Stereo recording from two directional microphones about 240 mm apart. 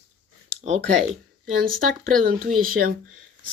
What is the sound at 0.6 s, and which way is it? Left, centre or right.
Speech, right.